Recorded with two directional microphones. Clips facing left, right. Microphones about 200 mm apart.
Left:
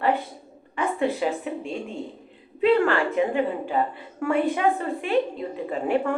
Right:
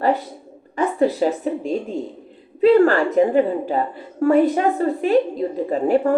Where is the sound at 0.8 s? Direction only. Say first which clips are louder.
Right 6 dB; 40° right (ahead or behind).